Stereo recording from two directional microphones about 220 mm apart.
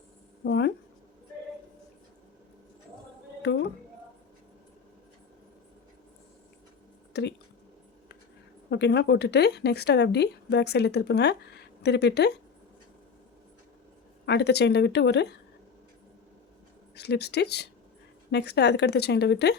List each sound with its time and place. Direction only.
0.4 s speech: 50° left (ahead or behind)
3.4 s a sound: 50° left (ahead or behind)
7.1 s a sound: 50° left (ahead or behind)
8.7 s speech: 50° left (ahead or behind)
14.3 s speech: 50° left (ahead or behind)
16.9 s speech: 50° left (ahead or behind)